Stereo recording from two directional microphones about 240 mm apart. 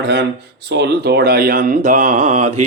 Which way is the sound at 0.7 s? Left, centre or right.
Right.